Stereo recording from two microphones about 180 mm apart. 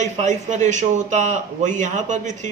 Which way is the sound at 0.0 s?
40° right (ahead or behind).